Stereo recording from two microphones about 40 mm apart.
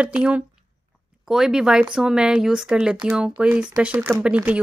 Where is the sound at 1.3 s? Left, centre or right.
Centre.